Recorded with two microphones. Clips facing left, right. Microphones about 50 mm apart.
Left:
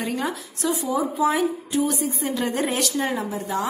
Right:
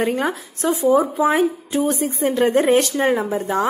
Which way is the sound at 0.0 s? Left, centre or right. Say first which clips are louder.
Right 6 dB; right.